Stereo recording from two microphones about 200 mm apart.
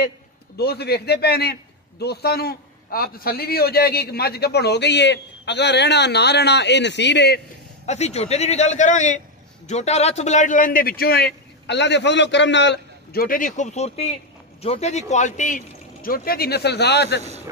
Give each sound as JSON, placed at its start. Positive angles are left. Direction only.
{"t": 0.6, "sound": "a man's voice", "side_deg": 55}
{"t": 7.8, "sound": "a man's voice", "side_deg": 35}